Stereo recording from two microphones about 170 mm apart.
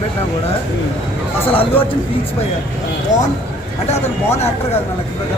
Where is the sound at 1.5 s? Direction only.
35° left (ahead or behind).